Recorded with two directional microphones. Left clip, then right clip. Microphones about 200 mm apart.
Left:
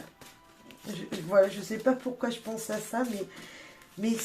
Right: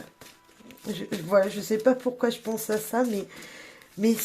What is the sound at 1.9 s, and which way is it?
Speech, 45° right (ahead or behind).